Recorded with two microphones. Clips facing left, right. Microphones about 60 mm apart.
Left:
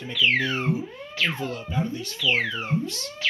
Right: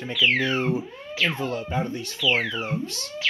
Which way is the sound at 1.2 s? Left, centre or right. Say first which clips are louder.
Right 3 dB; right.